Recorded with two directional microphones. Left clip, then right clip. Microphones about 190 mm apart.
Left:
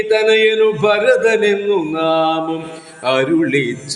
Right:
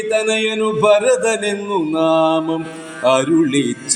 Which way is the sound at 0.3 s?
45° right (ahead or behind).